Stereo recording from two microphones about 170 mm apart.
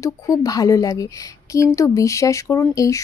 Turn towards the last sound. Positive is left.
turn(degrees=20)  # may be behind; listen again after turning